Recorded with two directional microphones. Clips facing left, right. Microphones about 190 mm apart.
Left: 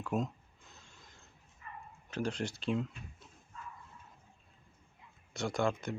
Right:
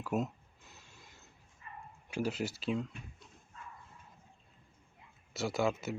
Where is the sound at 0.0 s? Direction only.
5° right (ahead or behind).